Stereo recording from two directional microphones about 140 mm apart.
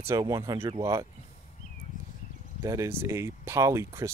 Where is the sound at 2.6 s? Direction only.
20° right (ahead or behind).